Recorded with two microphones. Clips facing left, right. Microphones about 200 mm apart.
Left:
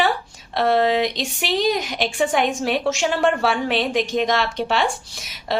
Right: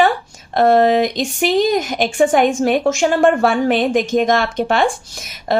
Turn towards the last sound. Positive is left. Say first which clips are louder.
# right 6 dB
turn(degrees=-50)  # may be behind; listen again after turning